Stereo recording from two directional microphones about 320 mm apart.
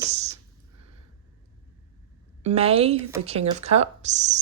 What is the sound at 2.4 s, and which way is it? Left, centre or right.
A woman's voice, centre.